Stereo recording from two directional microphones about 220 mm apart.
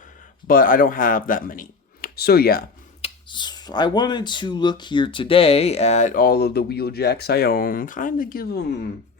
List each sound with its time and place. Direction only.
0.4 s a man's voice: 40° left (ahead or behind)
3.0 s speech: 20° left (ahead or behind); by 8.6 s 45° left (ahead or behind)